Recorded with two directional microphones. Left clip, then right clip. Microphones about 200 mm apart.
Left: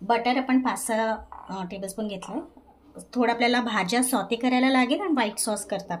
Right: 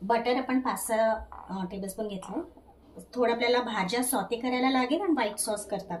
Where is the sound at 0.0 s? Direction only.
50° left (ahead or behind).